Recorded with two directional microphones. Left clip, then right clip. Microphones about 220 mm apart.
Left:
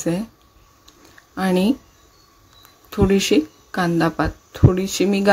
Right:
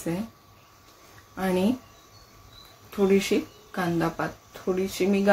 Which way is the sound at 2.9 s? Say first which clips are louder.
Left 6 dB; 50° left (ahead or behind).